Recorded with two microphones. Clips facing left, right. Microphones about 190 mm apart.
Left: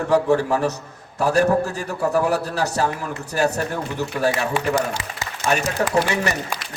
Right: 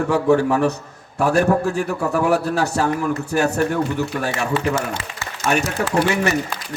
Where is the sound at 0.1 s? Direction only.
35° left (ahead or behind).